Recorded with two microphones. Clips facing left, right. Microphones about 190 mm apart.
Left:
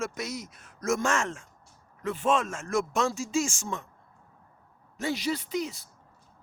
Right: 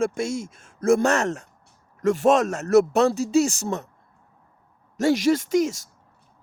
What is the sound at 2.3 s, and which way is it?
Speech, 40° right (ahead or behind).